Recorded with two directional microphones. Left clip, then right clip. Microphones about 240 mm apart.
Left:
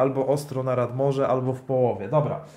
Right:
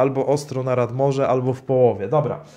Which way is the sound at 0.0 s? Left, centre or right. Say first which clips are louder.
Right 3 dB; right.